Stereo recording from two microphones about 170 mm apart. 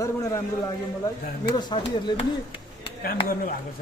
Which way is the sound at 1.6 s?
25° left (ahead or behind).